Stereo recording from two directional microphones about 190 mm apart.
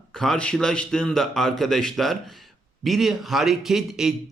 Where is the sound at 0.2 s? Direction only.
5° left (ahead or behind).